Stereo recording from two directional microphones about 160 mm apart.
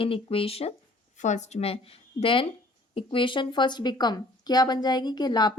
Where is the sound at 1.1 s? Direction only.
50° left (ahead or behind).